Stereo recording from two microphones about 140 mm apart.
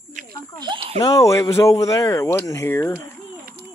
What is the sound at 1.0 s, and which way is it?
Speech, 25° left (ahead or behind).